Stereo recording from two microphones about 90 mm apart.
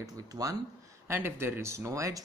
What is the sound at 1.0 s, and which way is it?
Speech, 25° right (ahead or behind).